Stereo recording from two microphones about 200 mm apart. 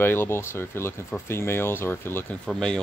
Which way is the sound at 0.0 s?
10° left (ahead or behind).